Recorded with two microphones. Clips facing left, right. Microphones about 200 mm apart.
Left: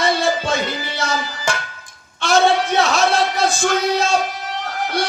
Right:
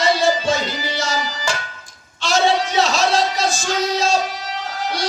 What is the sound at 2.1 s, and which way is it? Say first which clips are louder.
Speech: left 2 dB; 55° left (ahead or behind).